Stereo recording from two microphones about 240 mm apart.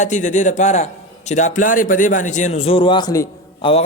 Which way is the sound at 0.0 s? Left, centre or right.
Left.